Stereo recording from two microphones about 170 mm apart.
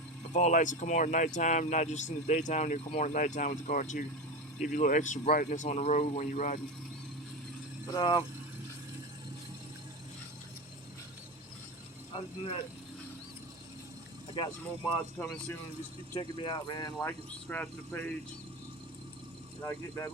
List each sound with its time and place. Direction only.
0.3 s speech: 45° left (ahead or behind)
7.9 s speech: 25° left (ahead or behind)
12.4 s speech: 30° left (ahead or behind)
15.2 s speech: 10° left (ahead or behind)
16.1 s speech: 25° left (ahead or behind)
17.1 s speech: 10° left (ahead or behind)
19.6 s speech: 15° left (ahead or behind)